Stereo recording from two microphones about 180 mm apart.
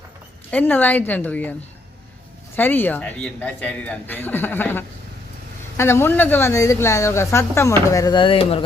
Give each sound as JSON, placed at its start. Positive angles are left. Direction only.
{"t": 0.5, "sound": "a woman's voice", "side_deg": 10}
{"t": 2.6, "sound": "a woman's voice", "side_deg": 10}